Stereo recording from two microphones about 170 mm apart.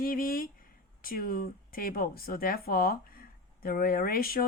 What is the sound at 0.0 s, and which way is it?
Speech, 55° left (ahead or behind).